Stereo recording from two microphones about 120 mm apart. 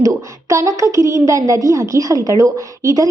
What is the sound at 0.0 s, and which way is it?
A woman's voice, 25° right (ahead or behind).